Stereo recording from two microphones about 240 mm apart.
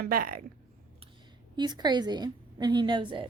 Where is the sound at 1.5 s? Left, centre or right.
Centre.